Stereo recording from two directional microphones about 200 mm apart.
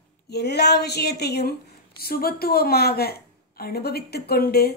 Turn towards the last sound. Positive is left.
turn(degrees=50)  # may be behind; listen again after turning